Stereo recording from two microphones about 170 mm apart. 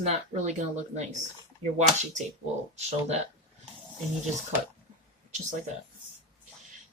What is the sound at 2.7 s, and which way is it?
Speech, 40° right (ahead or behind).